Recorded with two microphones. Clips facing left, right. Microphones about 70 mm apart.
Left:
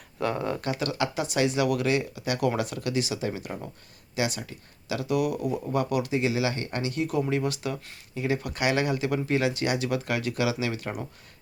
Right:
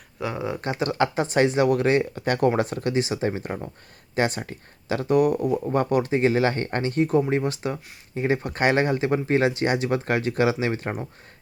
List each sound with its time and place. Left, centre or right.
0.2 s speech: centre
0.6 s speech: right